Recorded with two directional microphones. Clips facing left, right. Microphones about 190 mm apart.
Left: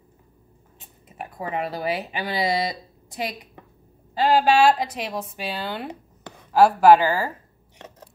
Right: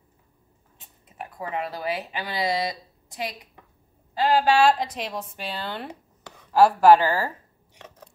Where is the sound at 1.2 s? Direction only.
15° left (ahead or behind).